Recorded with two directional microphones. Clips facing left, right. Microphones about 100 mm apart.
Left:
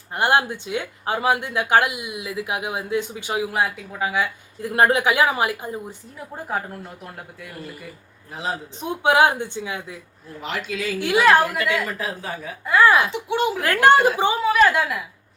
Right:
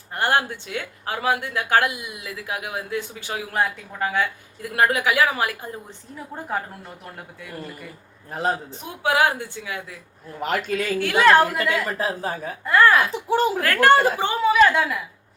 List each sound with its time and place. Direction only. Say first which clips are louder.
0.1 s speech: left 2 dB; 20° left (ahead or behind)
3.6 s speech: even; 5° left (ahead or behind)
4.6 s speech: left 3 dB; 25° left (ahead or behind)
6.1 s a woman's voice: even; 5° left (ahead or behind)
8.3 s speech: right 4 dB; 50° right (ahead or behind)
8.8 s speech: left 4 dB; 25° left (ahead or behind)
10.4 s speech: right 4 dB; 45° right (ahead or behind)
11.2 s a woman's voice: right 1 dB; 5° left (ahead or behind)
11.5 s a woman's voice: even; 40° right (ahead or behind)
12.6 s a woman's voice: even; 5° left (ahead or behind)
13.1 s a woman's voice: right 1 dB; 40° right (ahead or behind)
13.6 s speech: left 3 dB; 20° left (ahead or behind)
14.4 s a woman's voice: right 2 dB; centre (ahead or behind)